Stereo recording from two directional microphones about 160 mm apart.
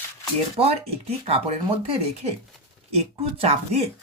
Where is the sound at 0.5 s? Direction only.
40° right (ahead or behind).